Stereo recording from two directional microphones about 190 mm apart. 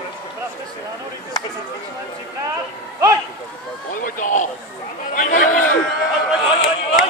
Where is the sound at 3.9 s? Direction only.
45° left (ahead or behind).